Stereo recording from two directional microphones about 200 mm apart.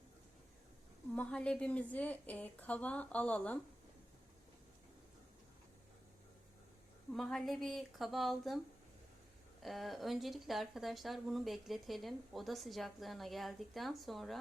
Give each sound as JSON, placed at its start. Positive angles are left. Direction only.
{"t": 1.1, "sound": "a woman's voice", "side_deg": 5}
{"t": 7.1, "sound": "speech", "side_deg": 0}
{"t": 9.6, "sound": "speech", "side_deg": 0}